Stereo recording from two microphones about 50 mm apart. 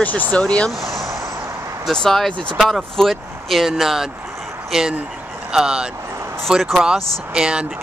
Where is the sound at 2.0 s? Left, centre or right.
Centre.